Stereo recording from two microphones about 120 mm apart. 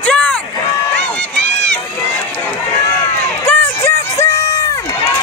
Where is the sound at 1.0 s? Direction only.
10° left (ahead or behind).